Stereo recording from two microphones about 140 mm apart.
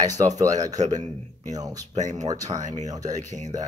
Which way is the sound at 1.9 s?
55° right (ahead or behind).